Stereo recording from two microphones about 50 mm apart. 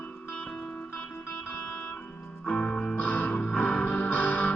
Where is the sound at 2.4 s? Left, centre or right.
Left.